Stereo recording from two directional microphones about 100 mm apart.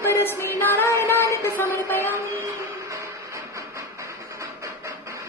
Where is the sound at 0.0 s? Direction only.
25° left (ahead or behind).